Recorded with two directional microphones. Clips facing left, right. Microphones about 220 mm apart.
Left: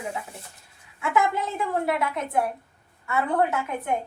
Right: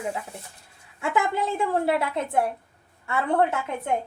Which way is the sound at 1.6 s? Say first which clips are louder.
Right 1 dB; 30° right (ahead or behind).